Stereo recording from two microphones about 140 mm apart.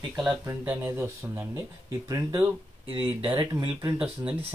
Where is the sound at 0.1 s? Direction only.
5° right (ahead or behind).